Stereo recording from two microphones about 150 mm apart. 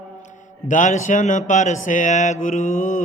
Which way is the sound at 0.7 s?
55° left (ahead or behind).